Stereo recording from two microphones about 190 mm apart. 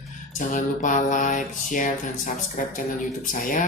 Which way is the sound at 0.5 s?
45° left (ahead or behind).